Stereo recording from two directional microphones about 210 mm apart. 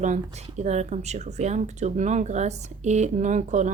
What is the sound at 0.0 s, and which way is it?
Speech, 35° right (ahead or behind).